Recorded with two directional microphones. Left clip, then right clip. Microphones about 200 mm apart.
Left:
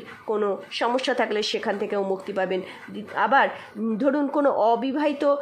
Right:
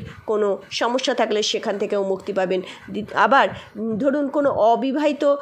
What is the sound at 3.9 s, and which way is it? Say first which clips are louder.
A woman's voice: right 2 dB; 5° right (ahead or behind).